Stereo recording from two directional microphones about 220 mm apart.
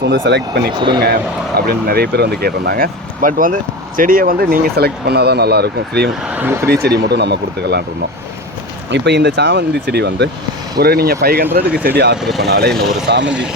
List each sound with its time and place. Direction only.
0.0 s speech: 50° right (ahead or behind)
6.2 s speech: 10° right (ahead or behind)
6.8 s speech: 45° right (ahead or behind)
8.9 s speech: 50° right (ahead or behind)
12.2 s speech: centre (ahead or behind)
12.5 s speech: 45° right (ahead or behind)
12.7 s speech: centre (ahead or behind)